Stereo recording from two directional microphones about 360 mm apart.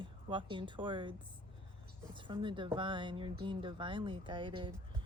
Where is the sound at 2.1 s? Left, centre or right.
Centre.